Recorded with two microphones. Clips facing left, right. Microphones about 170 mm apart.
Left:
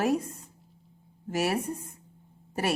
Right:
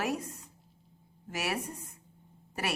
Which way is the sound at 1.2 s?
30° left (ahead or behind).